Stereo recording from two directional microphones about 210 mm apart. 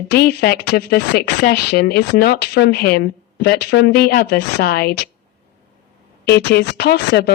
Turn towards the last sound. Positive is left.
turn(degrees=50)  # may be behind; listen again after turning